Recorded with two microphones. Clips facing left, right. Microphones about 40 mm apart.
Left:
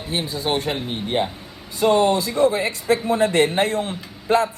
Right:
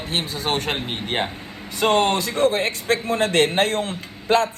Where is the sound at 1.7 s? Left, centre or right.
Right.